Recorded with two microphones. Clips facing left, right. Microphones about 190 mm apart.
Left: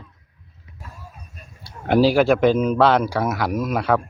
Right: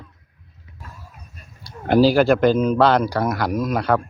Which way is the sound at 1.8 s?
Centre (ahead or behind).